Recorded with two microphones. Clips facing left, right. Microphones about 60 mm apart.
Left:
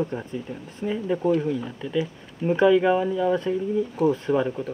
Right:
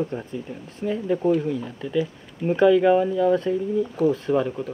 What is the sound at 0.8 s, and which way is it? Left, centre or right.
Speech, centre.